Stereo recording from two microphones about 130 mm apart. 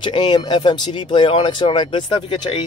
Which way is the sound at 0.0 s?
35° left (ahead or behind).